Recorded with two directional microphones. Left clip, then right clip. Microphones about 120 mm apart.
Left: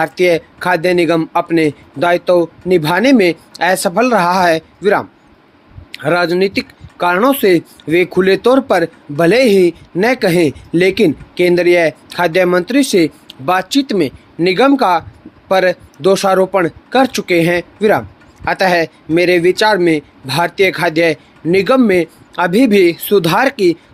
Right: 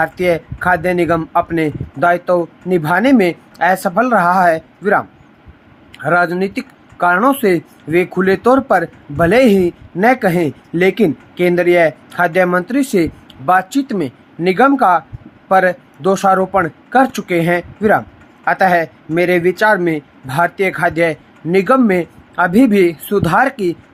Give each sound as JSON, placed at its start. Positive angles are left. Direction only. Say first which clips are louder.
{"t": 0.0, "sound": "speech", "louder": "left 2 dB", "side_deg": 45}
{"t": 2.7, "sound": "speech", "louder": "left 1 dB", "side_deg": 50}